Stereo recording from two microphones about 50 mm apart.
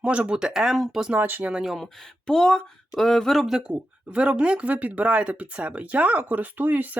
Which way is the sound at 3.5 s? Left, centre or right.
Centre.